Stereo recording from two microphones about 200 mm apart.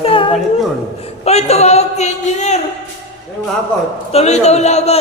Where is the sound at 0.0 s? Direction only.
25° left (ahead or behind).